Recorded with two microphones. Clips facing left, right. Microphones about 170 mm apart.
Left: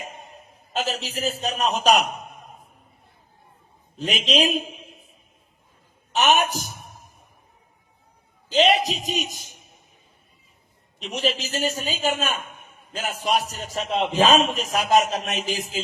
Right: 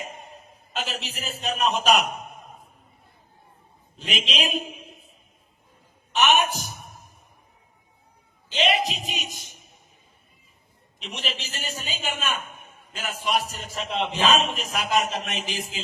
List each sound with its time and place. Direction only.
0.7 s a man's voice: 40° left (ahead or behind)
3.9 s a man's voice: 40° left (ahead or behind)
6.1 s a man's voice: 40° left (ahead or behind)
8.4 s a man's voice: 40° left (ahead or behind)
11.0 s a man's voice: 40° left (ahead or behind)